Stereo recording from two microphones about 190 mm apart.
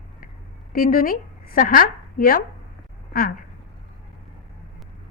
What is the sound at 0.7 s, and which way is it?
A woman's voice, 50° left (ahead or behind).